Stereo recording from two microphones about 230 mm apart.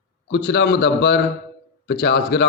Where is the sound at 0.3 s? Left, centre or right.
Left.